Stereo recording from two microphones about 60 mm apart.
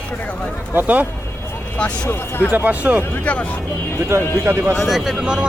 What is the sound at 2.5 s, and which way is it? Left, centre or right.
Speech, right.